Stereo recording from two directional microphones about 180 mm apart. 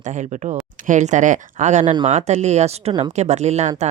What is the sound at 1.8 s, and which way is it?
Speech, 25° right (ahead or behind).